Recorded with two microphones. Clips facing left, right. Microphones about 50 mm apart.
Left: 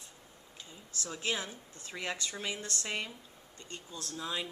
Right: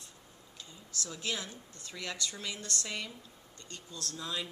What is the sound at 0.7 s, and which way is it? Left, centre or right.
A woman's voice, left.